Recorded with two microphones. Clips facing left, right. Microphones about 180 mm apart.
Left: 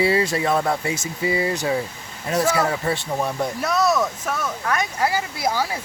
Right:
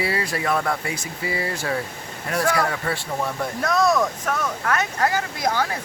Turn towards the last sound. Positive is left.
turn(degrees=10)  # may be behind; listen again after turning